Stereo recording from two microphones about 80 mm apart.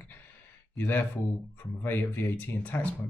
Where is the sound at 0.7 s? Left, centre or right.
Left.